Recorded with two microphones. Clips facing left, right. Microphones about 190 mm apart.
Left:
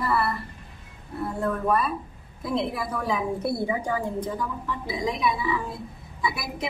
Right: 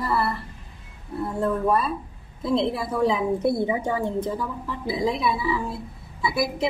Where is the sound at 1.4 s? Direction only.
25° right (ahead or behind).